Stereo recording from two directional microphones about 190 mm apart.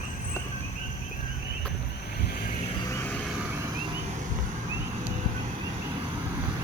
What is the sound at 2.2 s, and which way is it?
Vehicle, 55° left (ahead or behind).